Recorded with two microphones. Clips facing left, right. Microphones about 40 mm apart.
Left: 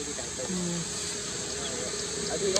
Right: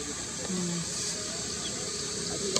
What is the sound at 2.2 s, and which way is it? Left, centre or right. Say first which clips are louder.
Speech: left 5 dB; left.